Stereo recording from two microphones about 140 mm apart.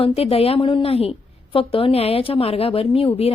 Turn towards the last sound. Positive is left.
turn(degrees=40)  # may be behind; listen again after turning